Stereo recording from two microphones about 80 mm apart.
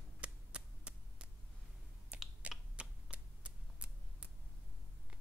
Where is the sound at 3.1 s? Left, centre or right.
Centre.